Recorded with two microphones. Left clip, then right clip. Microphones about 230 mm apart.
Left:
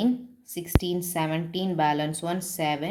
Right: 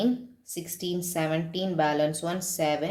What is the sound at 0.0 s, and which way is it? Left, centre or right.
Speech, left.